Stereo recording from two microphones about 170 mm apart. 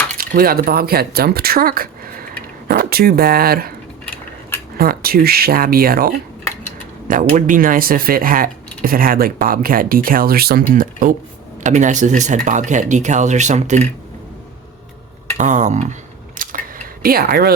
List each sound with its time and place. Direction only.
0.2 s speech: 60° right (ahead or behind)
4.8 s speech: 60° right (ahead or behind); by 13.8 s 45° right (ahead or behind)
15.4 s speech: 45° right (ahead or behind)
16.4 s a sound: 50° right (ahead or behind)
17.0 s speech: 60° right (ahead or behind)